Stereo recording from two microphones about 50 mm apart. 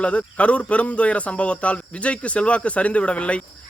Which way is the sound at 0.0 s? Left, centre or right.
Left.